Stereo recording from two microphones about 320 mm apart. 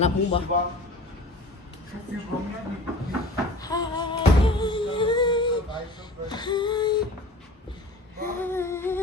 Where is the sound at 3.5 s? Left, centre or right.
Centre.